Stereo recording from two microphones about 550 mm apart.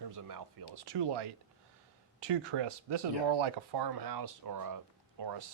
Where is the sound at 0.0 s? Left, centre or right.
Right.